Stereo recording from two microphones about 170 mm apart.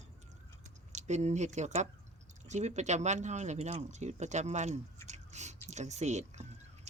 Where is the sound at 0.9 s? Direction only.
40° right (ahead or behind).